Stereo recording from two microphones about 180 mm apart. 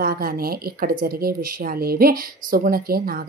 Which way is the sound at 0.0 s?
55° right (ahead or behind).